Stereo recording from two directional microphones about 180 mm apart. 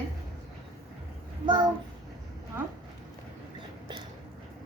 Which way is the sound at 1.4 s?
25° right (ahead or behind).